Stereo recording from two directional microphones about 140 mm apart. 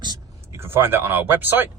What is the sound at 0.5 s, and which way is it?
Speech, 15° right (ahead or behind).